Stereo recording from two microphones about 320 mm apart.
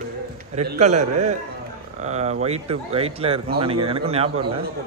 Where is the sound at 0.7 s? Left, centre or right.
Right.